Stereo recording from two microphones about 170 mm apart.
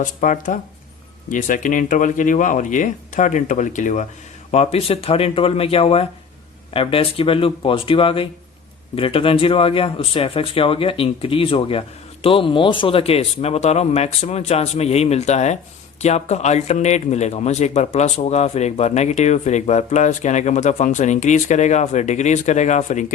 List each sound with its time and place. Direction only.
0.0 s speech: 50° left (ahead or behind)